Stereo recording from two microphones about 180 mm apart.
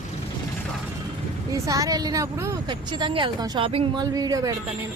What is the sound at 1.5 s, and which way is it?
A woman's voice, 15° right (ahead or behind).